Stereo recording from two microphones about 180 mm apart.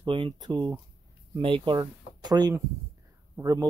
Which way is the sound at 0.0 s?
25° right (ahead or behind).